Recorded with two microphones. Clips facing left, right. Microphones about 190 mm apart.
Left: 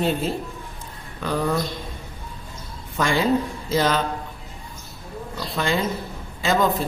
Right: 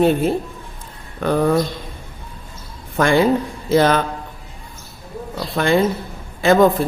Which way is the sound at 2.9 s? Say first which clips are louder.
Right 5 dB; 55° right (ahead or behind).